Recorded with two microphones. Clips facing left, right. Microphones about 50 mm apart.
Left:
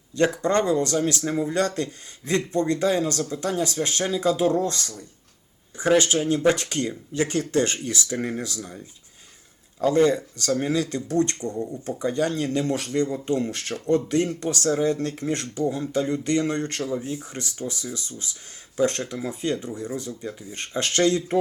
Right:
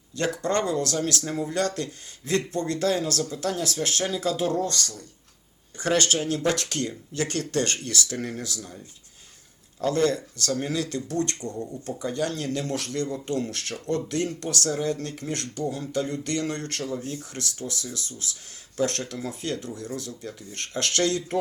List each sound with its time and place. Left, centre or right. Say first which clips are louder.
0.2 s speech: left 4 dB; left
9.8 s speech: left 4 dB; centre
11.5 s speech: left 4 dB; centre
11.9 s speech: left 4 dB; left